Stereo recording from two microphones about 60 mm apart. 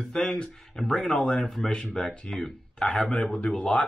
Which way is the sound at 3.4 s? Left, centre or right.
Centre.